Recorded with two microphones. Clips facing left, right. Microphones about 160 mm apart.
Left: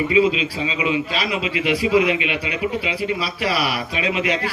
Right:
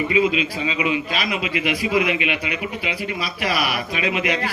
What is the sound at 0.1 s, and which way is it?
A man's voice, 30° left (ahead or behind).